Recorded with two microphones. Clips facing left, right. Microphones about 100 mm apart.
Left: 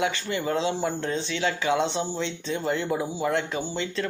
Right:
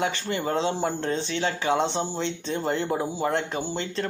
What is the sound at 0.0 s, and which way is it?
Speech, 35° right (ahead or behind).